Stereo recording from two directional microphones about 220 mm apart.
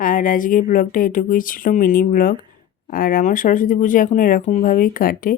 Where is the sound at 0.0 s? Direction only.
40° left (ahead or behind).